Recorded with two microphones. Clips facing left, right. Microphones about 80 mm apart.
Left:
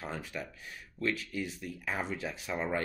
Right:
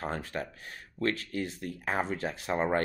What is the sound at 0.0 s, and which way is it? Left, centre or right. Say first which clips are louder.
Speech: right 5 dB; right.